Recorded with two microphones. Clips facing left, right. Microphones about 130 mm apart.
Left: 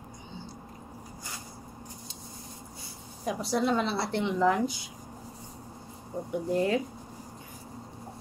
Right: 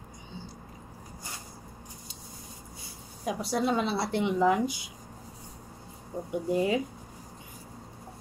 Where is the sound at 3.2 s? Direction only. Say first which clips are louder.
Left 1 dB; centre (ahead or behind).